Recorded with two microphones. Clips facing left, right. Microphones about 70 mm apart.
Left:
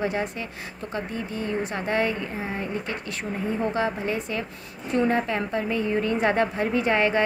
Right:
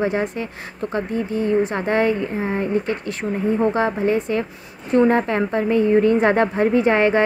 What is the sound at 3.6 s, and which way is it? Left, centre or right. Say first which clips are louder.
A woman's voice: right 6 dB; right.